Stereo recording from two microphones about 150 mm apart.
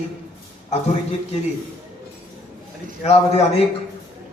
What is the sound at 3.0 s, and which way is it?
Speech, 40° left (ahead or behind).